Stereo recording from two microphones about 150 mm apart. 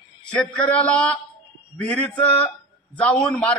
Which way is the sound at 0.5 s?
10° left (ahead or behind).